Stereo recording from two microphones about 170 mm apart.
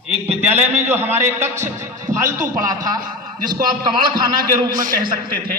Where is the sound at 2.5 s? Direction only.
20° right (ahead or behind).